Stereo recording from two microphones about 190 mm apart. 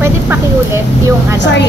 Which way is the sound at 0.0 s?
15° right (ahead or behind).